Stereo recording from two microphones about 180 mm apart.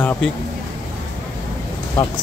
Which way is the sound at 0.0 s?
10° left (ahead or behind).